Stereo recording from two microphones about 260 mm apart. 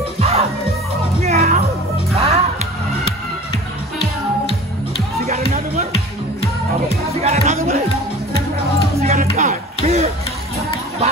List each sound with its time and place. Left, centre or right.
0.2 s music: right
5.2 s music: right
7.2 s music: right
9.0 s music: right